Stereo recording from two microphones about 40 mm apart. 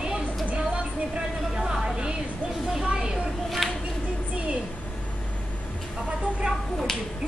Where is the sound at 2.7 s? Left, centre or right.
Centre.